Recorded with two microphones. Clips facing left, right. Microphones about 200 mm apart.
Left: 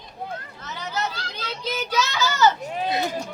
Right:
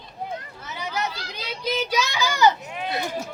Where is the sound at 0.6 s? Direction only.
10° right (ahead or behind).